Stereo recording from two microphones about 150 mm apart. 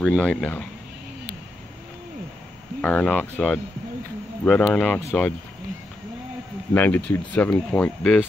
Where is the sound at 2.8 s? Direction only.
10° left (ahead or behind).